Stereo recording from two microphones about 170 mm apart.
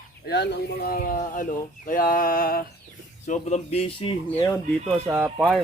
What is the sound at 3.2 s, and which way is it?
Speech, 45° left (ahead or behind).